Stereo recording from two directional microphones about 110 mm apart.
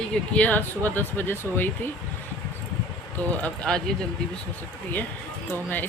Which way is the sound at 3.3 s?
10° left (ahead or behind).